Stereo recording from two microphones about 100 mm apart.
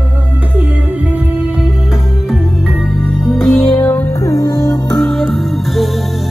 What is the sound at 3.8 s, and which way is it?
Music, 20° left (ahead or behind).